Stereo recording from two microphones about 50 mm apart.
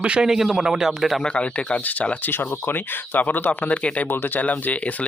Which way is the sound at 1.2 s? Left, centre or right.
Left.